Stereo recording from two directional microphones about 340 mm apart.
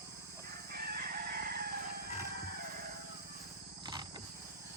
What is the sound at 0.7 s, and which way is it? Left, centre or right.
Chicken, right.